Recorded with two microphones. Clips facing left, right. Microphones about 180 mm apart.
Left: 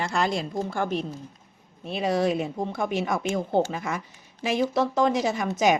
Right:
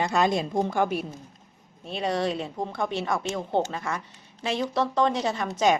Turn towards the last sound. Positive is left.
turn(degrees=10)  # may be behind; listen again after turning